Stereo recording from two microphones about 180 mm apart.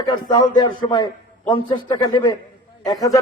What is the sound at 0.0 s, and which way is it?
A man's voice, 25° left (ahead or behind).